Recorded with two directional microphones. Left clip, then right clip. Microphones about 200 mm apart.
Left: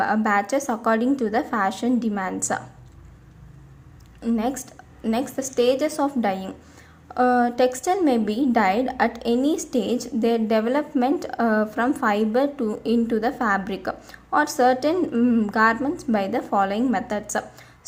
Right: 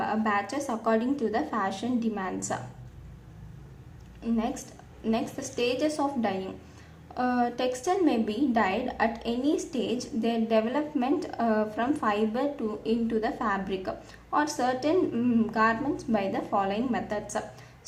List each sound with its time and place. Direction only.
0.0 s a woman's voice: 35° left (ahead or behind)
4.2 s a woman's voice: 35° left (ahead or behind)